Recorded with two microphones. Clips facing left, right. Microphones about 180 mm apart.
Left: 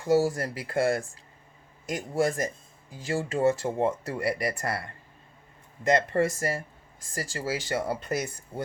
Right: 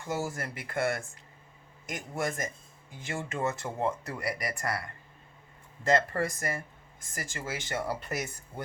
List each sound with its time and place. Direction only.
0.0 s speech: 35° left (ahead or behind)